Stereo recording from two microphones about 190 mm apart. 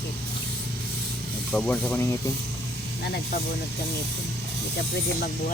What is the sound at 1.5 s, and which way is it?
Speech, 5° left (ahead or behind).